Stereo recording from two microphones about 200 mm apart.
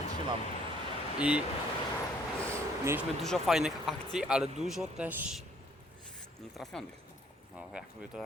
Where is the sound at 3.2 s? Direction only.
Centre (ahead or behind).